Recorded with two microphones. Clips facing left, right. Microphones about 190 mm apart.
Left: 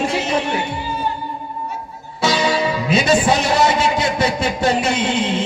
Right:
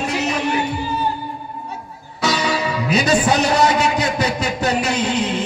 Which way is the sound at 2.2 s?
25° left (ahead or behind).